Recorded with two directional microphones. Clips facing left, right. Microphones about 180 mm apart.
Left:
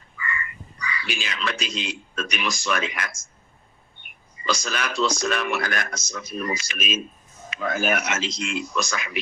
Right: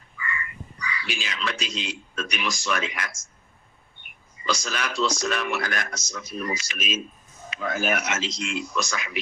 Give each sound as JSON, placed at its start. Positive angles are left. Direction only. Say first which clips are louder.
{"t": 0.2, "sound": "crow", "louder": "left 1 dB", "side_deg": 60}
{"t": 0.9, "sound": "speech", "louder": "left 2 dB", "side_deg": 55}
{"t": 4.4, "sound": "speech", "louder": "left 2 dB", "side_deg": 55}